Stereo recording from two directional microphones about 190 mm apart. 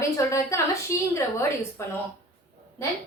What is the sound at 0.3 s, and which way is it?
A woman's voice, 15° left (ahead or behind).